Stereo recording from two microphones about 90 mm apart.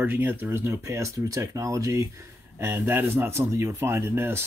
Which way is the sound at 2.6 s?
25° right (ahead or behind).